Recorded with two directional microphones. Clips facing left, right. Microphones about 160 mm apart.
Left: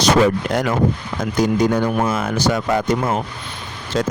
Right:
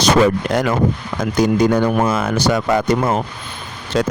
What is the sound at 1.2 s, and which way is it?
Speech, 85° right.